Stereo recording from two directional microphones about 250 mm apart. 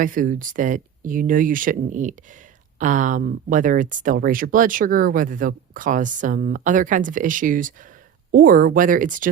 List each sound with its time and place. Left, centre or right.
0.0 s speech: right